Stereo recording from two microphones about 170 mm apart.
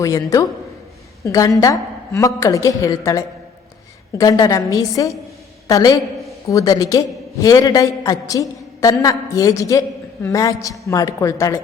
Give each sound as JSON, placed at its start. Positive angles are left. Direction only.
{"t": 0.0, "sound": "a man's voice", "side_deg": 20}